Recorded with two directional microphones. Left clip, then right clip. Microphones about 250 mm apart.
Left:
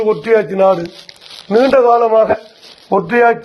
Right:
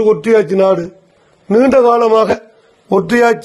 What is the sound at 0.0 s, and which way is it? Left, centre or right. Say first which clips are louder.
A man's voice: right 2 dB; right.